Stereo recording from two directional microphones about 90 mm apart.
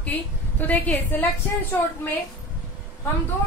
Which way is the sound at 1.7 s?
25° left (ahead or behind).